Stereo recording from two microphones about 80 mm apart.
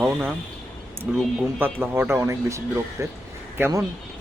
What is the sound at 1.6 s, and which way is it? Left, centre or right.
Speech, right.